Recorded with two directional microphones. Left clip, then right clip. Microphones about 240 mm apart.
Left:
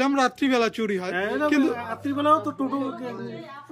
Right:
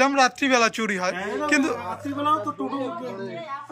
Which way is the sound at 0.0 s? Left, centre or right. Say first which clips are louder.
Right 3 dB; centre.